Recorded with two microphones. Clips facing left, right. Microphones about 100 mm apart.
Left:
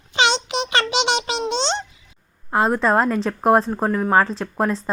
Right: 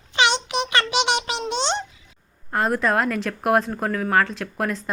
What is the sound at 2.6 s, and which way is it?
A woman's voice, 30° left (ahead or behind).